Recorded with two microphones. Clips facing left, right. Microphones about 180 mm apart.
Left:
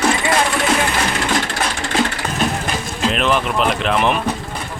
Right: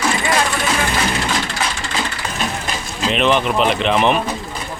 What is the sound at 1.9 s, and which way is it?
Vehicle, 50° left (ahead or behind).